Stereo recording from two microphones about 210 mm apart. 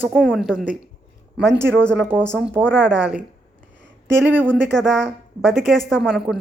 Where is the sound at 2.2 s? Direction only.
10° right (ahead or behind).